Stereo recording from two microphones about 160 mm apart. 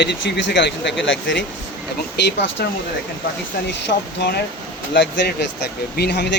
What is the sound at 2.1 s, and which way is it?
Speech, 90° left.